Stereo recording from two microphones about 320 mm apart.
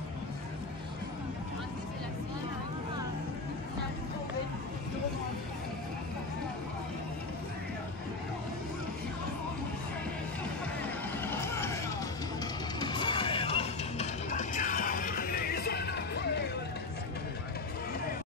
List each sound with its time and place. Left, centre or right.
11.1 s vehicle: centre
12.8 s music: centre; by 16.4 s left